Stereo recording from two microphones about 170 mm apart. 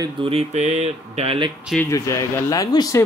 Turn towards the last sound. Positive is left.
turn(degrees=20)  # may be behind; listen again after turning